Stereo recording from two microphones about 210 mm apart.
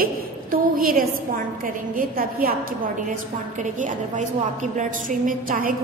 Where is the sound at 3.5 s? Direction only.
35° right (ahead or behind).